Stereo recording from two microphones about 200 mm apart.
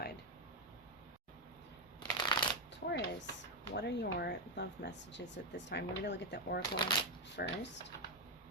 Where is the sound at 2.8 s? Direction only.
50° left (ahead or behind).